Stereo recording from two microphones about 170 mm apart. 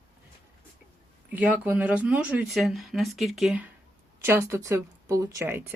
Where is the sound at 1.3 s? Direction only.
10° right (ahead or behind).